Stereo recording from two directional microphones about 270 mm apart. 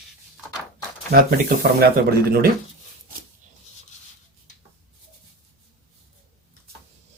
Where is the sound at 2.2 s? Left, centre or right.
Right.